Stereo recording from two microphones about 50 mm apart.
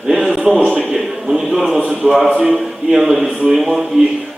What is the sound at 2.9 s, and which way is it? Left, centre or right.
Speech, centre.